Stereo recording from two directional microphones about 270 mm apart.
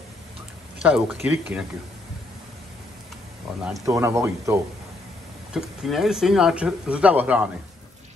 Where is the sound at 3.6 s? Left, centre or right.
Centre.